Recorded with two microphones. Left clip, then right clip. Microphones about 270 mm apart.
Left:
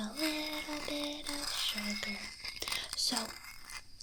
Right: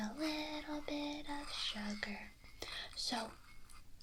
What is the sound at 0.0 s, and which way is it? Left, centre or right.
Female singing, centre.